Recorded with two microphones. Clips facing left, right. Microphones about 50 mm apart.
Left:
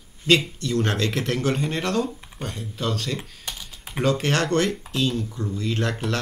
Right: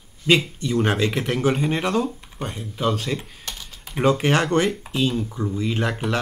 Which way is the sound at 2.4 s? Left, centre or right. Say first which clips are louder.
Right 4 dB; centre.